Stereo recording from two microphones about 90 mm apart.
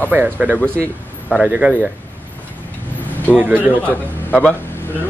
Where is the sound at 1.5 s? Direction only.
15° right (ahead or behind).